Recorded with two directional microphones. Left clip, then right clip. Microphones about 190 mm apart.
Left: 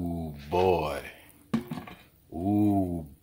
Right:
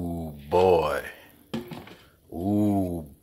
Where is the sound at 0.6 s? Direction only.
5° left (ahead or behind).